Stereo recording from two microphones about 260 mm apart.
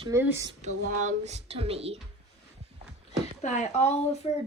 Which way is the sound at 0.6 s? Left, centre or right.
Right.